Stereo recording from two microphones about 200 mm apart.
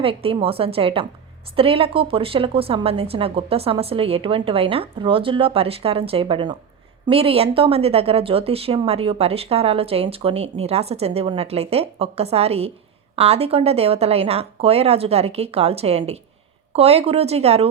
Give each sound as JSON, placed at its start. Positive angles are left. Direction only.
{"t": 0.0, "sound": "a woman's voice", "side_deg": -30}